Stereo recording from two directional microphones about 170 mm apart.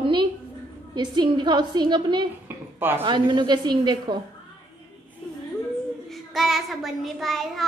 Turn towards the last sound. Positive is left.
turn(degrees=0)  # may be behind; listen again after turning